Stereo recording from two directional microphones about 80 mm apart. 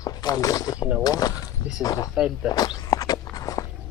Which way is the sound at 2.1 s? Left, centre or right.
Centre.